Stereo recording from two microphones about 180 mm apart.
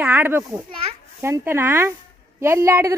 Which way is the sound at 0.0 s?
10° right (ahead or behind).